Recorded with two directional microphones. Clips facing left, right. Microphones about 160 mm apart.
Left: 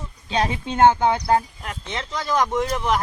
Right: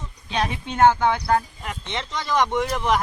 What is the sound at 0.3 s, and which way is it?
Speech, 30° left (ahead or behind).